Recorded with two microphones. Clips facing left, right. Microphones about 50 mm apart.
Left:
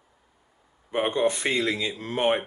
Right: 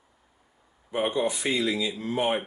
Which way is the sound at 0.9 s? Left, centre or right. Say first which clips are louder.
Left 2 dB; left.